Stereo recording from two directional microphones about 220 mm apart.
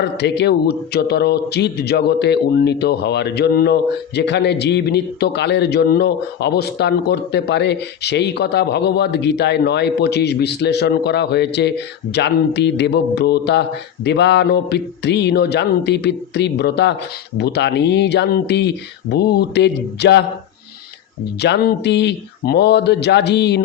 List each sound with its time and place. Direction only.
0.2 s a man's voice: 50° left (ahead or behind)
21.3 s a man's voice: 50° left (ahead or behind)